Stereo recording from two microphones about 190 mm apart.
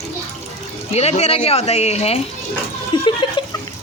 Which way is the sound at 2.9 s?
25° left (ahead or behind).